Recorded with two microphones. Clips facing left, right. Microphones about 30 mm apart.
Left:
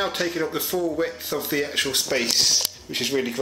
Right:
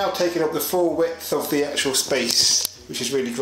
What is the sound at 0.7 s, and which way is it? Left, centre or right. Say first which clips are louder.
Speech: right 5 dB; right.